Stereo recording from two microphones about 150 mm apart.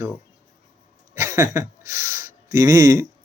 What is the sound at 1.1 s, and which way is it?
Speech, 15° right (ahead or behind).